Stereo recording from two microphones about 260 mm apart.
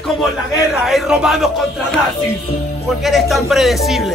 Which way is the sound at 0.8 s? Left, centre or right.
Centre.